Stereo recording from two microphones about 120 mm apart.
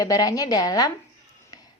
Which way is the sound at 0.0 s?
30° left (ahead or behind).